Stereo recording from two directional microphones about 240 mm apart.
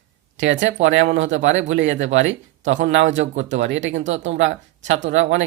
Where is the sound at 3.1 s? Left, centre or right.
Right.